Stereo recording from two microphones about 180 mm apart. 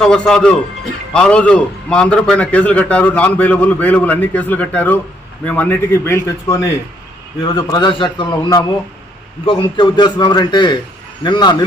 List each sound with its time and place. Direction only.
0.0 s a man's voice: 5° left (ahead or behind); by 11.5 s 25° left (ahead or behind)